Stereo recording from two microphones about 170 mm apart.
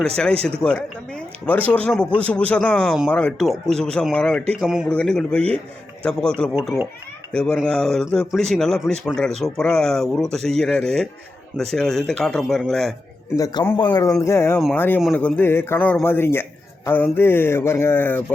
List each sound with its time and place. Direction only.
1.5 s a man's voice: 10° left (ahead or behind)
13.3 s a man's voice: 20° left (ahead or behind)